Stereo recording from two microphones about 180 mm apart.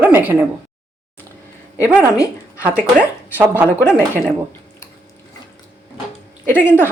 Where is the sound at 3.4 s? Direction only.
10° right (ahead or behind).